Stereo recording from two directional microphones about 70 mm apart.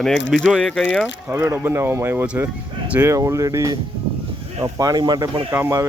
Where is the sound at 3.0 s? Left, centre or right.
Right.